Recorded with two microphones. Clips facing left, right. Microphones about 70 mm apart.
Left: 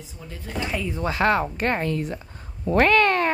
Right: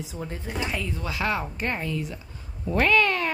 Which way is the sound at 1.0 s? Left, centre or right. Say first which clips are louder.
Left 9 dB; left.